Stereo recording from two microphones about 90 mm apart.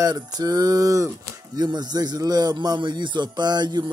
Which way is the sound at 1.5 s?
50° right (ahead or behind).